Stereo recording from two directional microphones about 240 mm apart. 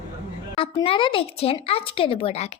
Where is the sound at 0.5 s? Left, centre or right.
Left.